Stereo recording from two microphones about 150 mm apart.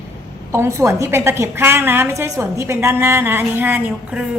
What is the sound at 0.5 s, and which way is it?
A woman's voice, 20° right (ahead or behind).